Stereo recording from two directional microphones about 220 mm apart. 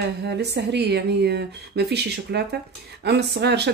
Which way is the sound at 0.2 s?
50° right (ahead or behind).